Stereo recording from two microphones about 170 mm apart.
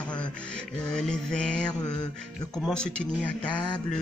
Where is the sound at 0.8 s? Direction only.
5° left (ahead or behind).